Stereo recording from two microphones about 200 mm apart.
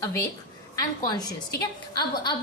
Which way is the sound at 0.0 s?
15° left (ahead or behind).